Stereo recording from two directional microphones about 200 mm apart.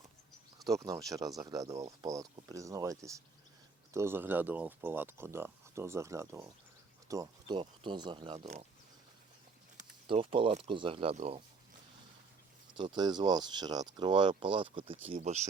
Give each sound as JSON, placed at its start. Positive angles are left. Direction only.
{"t": 0.6, "sound": "speech", "side_deg": -15}
{"t": 10.1, "sound": "speech", "side_deg": -25}
{"t": 12.7, "sound": "speech", "side_deg": -25}